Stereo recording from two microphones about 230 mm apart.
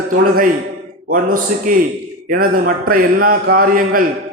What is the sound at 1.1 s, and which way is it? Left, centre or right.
A man's voice, right.